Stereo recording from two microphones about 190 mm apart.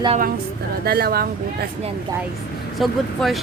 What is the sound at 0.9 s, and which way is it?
Speech, 55° right (ahead or behind).